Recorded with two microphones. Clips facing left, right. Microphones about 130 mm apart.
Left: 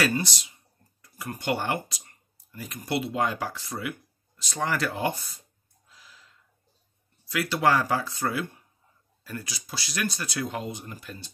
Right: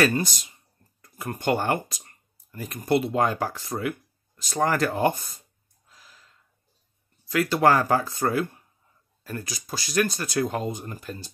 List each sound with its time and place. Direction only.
0.0 s speech: 50° right (ahead or behind)
5.9 s gasp: 45° right (ahead or behind)
7.2 s speech: 45° right (ahead or behind)